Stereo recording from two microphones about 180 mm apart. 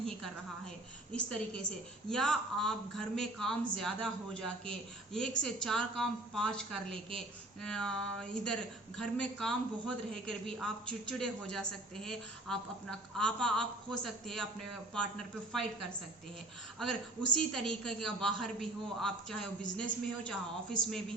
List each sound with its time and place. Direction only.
1.1 s speech: 5° left (ahead or behind)
16.7 s speech: 5° left (ahead or behind)